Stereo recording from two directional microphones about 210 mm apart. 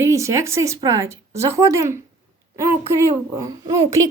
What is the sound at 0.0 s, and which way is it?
A woman's voice, 15° right (ahead or behind).